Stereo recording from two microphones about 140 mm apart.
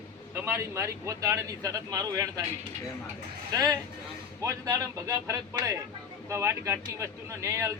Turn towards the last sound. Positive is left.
turn(degrees=-20)  # may be behind; listen again after turning